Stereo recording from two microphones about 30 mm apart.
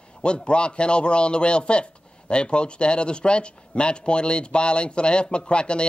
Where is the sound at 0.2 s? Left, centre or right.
Left.